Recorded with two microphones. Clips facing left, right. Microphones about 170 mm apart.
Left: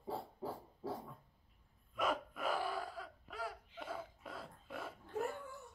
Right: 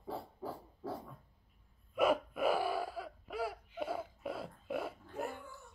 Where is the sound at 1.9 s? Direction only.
10° right (ahead or behind).